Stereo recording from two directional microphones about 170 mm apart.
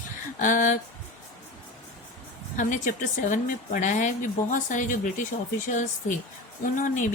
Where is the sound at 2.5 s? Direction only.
50° left (ahead or behind).